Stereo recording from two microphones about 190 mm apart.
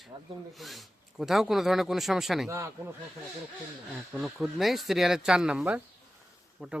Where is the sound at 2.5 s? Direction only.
15° right (ahead or behind).